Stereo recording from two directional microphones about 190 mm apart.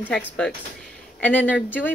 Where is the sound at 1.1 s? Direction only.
5° left (ahead or behind).